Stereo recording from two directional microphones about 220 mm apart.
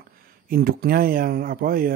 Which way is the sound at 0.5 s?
45° right (ahead or behind).